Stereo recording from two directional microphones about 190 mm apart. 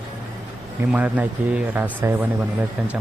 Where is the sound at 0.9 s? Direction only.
5° right (ahead or behind).